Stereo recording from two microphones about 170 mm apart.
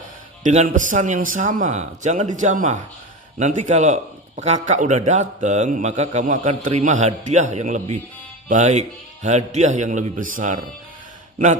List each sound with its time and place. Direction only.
0.4 s a man's voice: 45° right (ahead or behind)